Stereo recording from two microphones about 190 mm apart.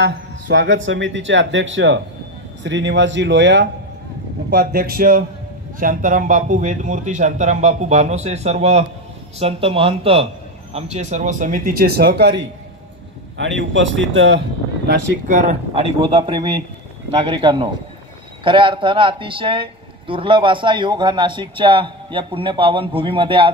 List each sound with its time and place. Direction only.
0.0 s speech: 70° right (ahead or behind)
4.5 s a man's voice: 55° right (ahead or behind)
13.4 s a man's voice: 80° right
15.2 s a man's voice: 40° right (ahead or behind); by 23.5 s 25° right (ahead or behind)